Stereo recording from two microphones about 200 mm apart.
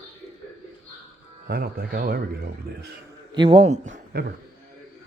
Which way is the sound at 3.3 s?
25° right (ahead or behind).